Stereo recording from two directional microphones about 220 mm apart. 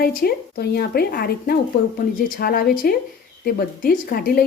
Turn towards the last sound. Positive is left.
turn(degrees=45)  # may be behind; listen again after turning